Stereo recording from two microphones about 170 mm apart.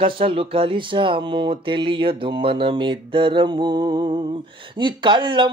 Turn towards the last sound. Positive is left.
turn(degrees=-30)  # may be behind; listen again after turning